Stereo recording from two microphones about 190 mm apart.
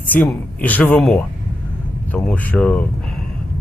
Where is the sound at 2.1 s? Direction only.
5° left (ahead or behind).